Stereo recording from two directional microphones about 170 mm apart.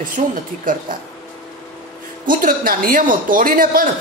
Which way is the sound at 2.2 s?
55° right (ahead or behind).